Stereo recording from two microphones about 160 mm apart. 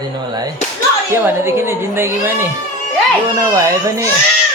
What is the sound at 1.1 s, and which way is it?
A woman's voice, 15° right (ahead or behind).